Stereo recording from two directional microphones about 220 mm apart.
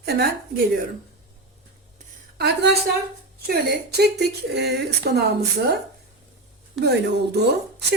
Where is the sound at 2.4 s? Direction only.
50° right (ahead or behind).